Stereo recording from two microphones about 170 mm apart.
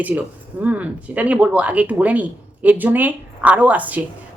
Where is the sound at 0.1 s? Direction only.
10° right (ahead or behind).